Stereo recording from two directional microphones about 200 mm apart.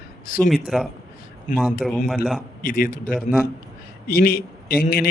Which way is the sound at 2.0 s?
Centre (ahead or behind).